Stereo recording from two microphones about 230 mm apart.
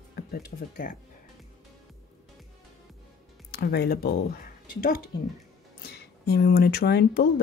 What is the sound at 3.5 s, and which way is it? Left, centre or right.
Speech, left.